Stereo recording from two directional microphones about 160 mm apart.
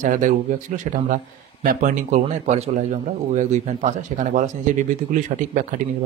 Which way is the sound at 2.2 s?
45° right (ahead or behind).